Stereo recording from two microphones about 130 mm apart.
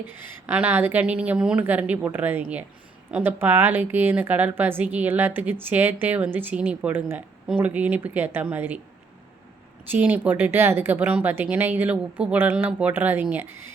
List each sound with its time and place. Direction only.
0.0 s a woman's voice: 15° right (ahead or behind)
9.9 s a woman's voice: 15° right (ahead or behind)